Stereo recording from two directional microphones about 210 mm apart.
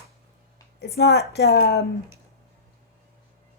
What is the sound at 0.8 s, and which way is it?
A woman's voice, 50° left (ahead or behind).